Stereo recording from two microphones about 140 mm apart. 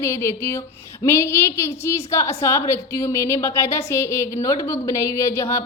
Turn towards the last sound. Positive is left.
turn(degrees=20)  # may be behind; listen again after turning